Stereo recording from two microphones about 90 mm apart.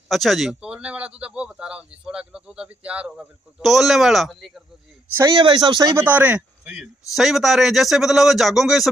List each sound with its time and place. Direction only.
0.1 s speech: centre (ahead or behind)
3.5 s a man's voice: centre (ahead or behind)
5.3 s speech: 55° right (ahead or behind)
5.9 s speech: 20° right (ahead or behind)
7.1 s a man's voice: centre (ahead or behind)